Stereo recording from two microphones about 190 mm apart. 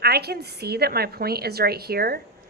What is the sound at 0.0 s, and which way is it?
A woman's voice, 55° right (ahead or behind).